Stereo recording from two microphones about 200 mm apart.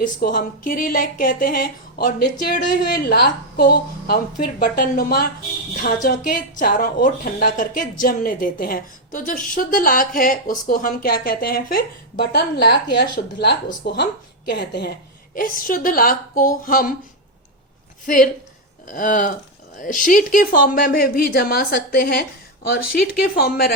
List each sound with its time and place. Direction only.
0.0 s a woman's voice: 45° left (ahead or behind)
15.4 s a woman's voice: 45° left (ahead or behind)
18.0 s a woman's voice: 40° left (ahead or behind)